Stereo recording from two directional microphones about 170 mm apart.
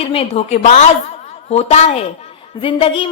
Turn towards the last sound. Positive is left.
turn(degrees=30)  # may be behind; listen again after turning